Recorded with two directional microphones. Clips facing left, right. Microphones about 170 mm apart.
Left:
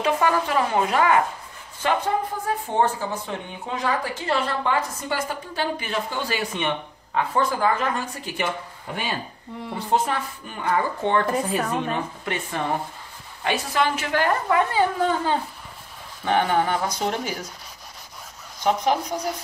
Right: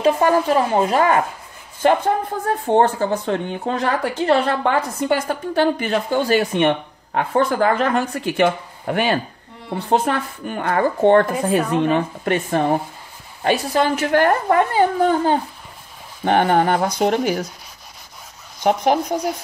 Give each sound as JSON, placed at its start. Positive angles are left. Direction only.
{"t": 0.0, "sound": "speech", "side_deg": -35}
{"t": 2.6, "sound": "a woman's voice", "side_deg": -70}
{"t": 12.4, "sound": "speech", "side_deg": -45}
{"t": 16.3, "sound": "speech", "side_deg": -60}
{"t": 18.6, "sound": "speech", "side_deg": -60}